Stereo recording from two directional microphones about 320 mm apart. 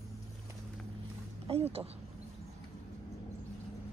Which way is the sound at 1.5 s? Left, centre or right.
Centre.